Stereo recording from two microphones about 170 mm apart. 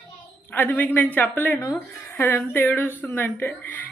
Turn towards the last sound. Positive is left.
turn(degrees=10)  # may be behind; listen again after turning